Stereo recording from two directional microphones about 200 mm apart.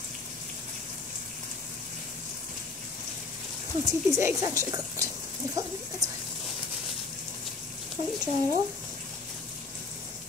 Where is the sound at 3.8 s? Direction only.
15° right (ahead or behind).